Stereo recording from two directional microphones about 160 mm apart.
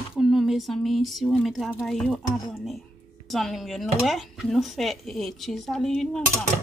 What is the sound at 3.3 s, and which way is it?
Speech, centre (ahead or behind).